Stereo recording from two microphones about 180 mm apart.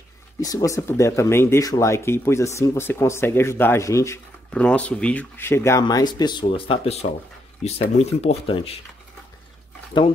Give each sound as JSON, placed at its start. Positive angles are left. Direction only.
{"t": 0.4, "sound": "speech", "side_deg": 20}
{"t": 9.9, "sound": "speech", "side_deg": 25}